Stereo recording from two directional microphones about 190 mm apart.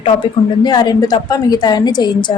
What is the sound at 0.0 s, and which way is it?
A woman's voice, 25° left (ahead or behind).